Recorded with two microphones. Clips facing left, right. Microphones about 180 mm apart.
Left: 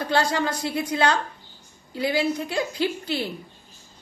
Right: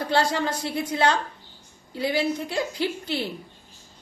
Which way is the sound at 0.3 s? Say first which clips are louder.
Left 1 dB; 20° right (ahead or behind).